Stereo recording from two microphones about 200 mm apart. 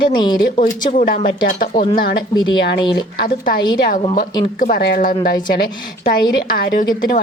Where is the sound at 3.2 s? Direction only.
50° left (ahead or behind).